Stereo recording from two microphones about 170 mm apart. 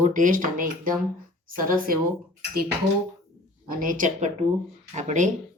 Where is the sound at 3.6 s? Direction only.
50° right (ahead or behind).